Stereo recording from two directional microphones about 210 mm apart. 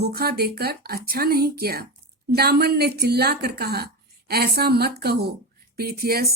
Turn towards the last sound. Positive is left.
turn(degrees=-45)  # may be behind; listen again after turning